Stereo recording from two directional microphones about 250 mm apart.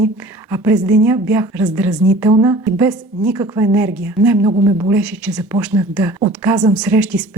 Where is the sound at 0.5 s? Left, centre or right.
Centre.